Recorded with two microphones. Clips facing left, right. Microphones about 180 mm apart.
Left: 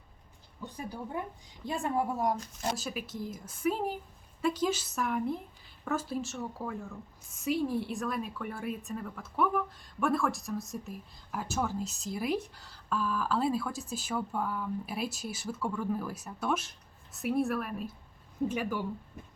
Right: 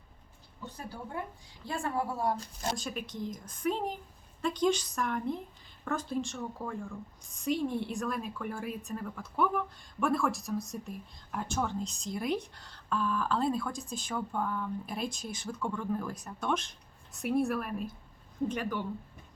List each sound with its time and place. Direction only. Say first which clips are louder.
0.6 s a woman's voice: left 3 dB; 15° left (ahead or behind)
2.6 s a woman's voice: left 1 dB; 5° left (ahead or behind)